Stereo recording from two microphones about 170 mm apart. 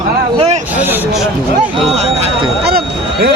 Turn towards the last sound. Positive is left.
turn(degrees=-65)  # may be behind; listen again after turning